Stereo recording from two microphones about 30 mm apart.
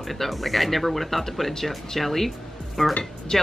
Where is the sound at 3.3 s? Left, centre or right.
Left.